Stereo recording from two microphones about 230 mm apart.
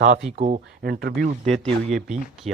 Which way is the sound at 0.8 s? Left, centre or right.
Right.